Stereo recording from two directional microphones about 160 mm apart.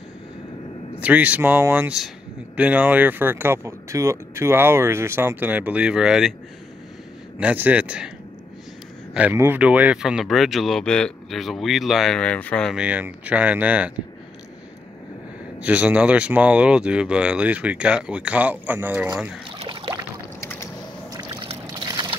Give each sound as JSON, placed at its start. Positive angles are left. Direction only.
{"t": 0.9, "sound": "speech", "side_deg": -10}
{"t": 7.3, "sound": "speech", "side_deg": -10}
{"t": 9.1, "sound": "speech", "side_deg": -10}
{"t": 12.7, "sound": "speech", "side_deg": -10}
{"t": 15.6, "sound": "speech", "side_deg": -10}
{"t": 19.6, "sound": "a sound", "side_deg": -30}
{"t": 21.2, "sound": "boat", "side_deg": -35}
{"t": 21.8, "sound": "a sound", "side_deg": -25}